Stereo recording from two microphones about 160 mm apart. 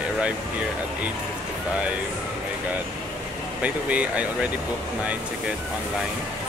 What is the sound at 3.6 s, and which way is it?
Speech, 10° right (ahead or behind).